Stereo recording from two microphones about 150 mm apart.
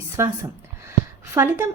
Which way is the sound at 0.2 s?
20° right (ahead or behind).